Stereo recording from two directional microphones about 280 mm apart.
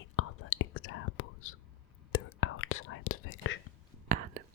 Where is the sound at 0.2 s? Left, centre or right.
Left.